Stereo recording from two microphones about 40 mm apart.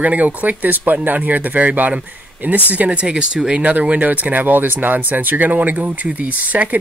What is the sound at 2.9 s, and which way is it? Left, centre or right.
Speech, right.